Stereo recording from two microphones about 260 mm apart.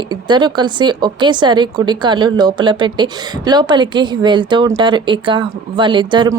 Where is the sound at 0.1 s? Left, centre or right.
Centre.